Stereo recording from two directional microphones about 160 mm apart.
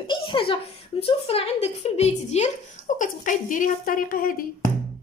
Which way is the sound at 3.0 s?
55° left (ahead or behind).